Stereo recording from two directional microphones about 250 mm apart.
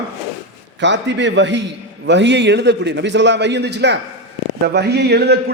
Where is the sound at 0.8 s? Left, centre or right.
Right.